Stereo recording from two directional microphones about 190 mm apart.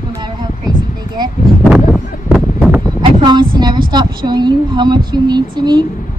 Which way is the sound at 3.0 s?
25° right (ahead or behind).